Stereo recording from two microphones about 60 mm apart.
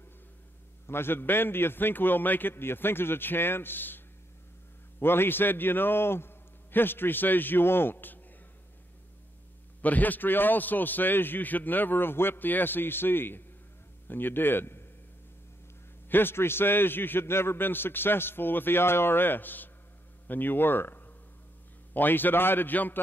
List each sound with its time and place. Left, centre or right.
0.8 s a man's voice: left
5.0 s a man's voice: left
9.8 s a man's voice: left
16.1 s a man's voice: left